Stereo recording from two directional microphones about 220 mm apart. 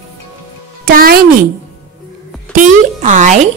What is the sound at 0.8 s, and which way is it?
Speech, 40° right (ahead or behind).